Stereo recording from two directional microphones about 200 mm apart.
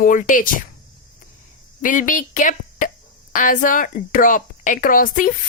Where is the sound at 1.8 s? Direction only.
40° left (ahead or behind).